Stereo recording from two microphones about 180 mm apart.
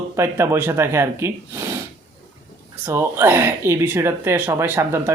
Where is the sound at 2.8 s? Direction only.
15° right (ahead or behind).